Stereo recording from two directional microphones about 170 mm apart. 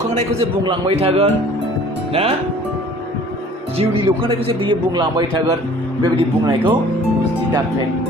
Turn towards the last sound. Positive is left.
turn(degrees=-30)  # may be behind; listen again after turning